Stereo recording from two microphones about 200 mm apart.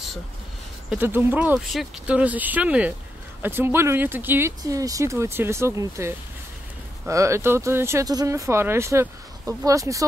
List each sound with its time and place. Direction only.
0.8 s speech: 10° right (ahead or behind)